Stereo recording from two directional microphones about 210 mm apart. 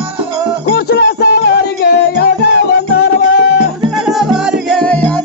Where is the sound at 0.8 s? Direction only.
50° left (ahead or behind).